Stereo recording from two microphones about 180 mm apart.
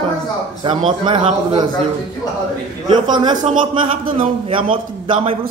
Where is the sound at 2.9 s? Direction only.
25° right (ahead or behind).